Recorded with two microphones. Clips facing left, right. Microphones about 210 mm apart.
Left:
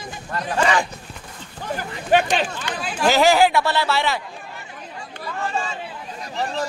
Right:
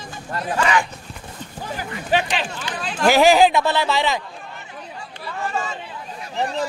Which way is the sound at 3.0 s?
15° right (ahead or behind).